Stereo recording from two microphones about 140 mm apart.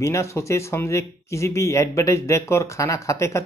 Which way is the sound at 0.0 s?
20° left (ahead or behind).